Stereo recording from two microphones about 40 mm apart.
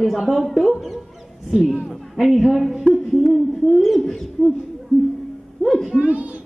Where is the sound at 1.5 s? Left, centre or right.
Right.